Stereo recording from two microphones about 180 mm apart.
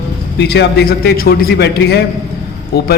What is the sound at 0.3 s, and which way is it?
A man's voice, 65° left (ahead or behind).